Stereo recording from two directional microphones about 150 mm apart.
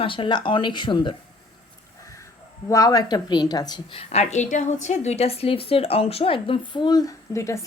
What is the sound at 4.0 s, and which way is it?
A woman's voice, 45° left (ahead or behind).